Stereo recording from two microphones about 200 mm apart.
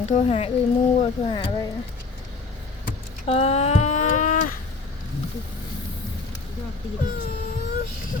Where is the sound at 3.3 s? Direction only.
30° left (ahead or behind).